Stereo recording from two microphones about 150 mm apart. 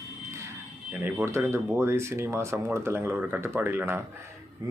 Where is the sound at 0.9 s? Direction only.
15° right (ahead or behind).